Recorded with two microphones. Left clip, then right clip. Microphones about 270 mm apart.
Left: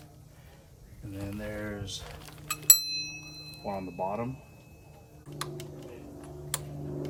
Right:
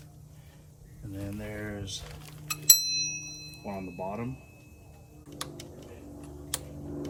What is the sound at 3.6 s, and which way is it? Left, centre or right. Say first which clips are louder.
Speech: left 4 dB; centre.